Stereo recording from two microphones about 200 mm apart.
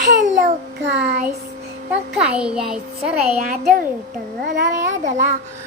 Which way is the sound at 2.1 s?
5° right (ahead or behind).